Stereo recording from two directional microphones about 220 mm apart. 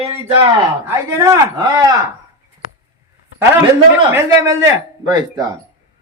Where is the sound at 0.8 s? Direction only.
15° right (ahead or behind).